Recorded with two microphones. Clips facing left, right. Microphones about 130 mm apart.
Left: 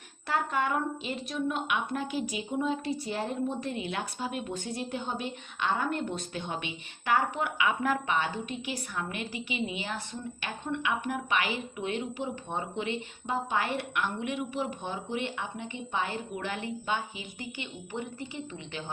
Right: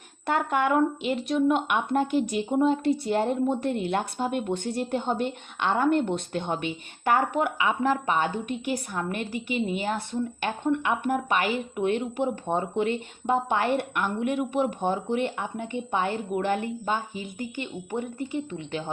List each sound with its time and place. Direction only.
0.3 s a woman's voice: 60° right (ahead or behind)
1.7 s a woman's voice: 50° right (ahead or behind)
7.6 s a woman's voice: 35° right (ahead or behind); by 18.8 s 50° right (ahead or behind)